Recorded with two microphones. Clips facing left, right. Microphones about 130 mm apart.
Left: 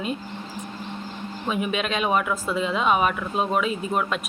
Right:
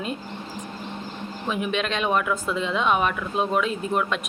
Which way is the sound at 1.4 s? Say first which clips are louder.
Even; centre (ahead or behind).